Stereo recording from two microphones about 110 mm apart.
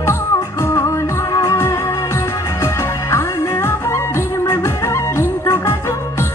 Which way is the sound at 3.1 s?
20° left (ahead or behind).